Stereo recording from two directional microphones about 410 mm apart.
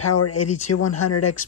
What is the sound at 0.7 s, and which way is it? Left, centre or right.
Speech, left.